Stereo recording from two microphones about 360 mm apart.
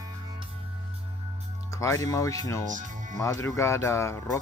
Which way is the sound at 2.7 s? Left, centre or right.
Right.